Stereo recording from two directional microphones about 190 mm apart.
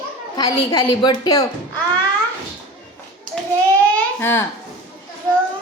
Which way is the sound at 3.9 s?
10° left (ahead or behind).